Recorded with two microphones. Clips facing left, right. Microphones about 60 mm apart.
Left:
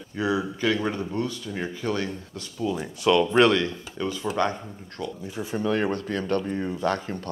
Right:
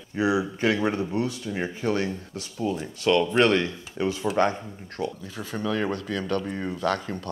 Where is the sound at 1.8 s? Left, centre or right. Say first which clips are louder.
Right 3 dB; right.